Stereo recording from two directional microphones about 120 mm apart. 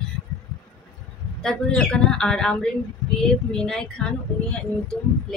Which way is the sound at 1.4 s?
5° left (ahead or behind).